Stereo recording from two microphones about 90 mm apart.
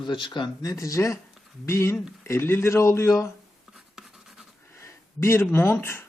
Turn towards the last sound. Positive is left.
turn(degrees=25)  # may be behind; listen again after turning